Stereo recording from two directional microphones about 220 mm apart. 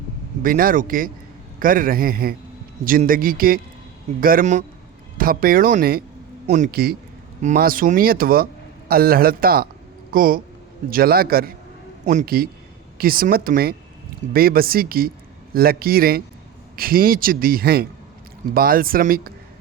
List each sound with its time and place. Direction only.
0.4 s a man's voice: 40° right (ahead or behind)